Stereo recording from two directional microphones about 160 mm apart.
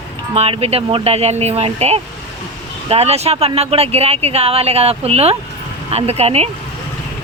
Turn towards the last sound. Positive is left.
turn(degrees=-40)  # may be behind; listen again after turning